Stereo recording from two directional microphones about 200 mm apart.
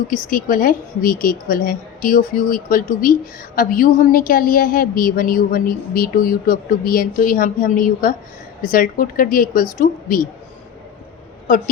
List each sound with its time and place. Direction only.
0.1 s a woman's voice: 45° left (ahead or behind)
11.4 s a woman's voice: 40° left (ahead or behind)